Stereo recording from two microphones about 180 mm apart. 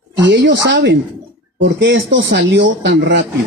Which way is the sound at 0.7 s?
80° right.